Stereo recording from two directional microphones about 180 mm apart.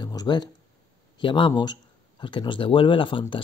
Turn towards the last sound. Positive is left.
turn(degrees=30)  # may be behind; listen again after turning